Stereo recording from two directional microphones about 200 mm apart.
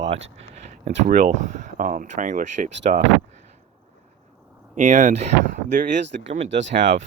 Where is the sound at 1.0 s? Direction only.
40° right (ahead or behind).